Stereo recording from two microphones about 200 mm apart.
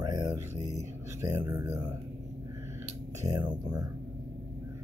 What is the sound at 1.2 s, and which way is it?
Speech, 15° right (ahead or behind).